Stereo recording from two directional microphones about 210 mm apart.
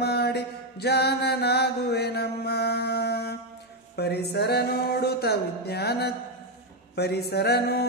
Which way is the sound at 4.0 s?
50° left (ahead or behind).